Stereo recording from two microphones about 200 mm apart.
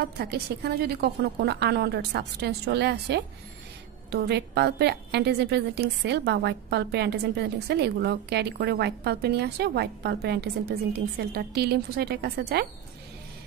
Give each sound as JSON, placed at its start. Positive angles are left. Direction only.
{"t": 0.0, "sound": "a woman's voice", "side_deg": -55}